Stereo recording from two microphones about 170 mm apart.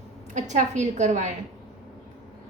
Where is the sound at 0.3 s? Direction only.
45° right (ahead or behind).